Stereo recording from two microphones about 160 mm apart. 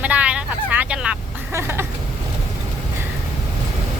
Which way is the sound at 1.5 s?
15° right (ahead or behind).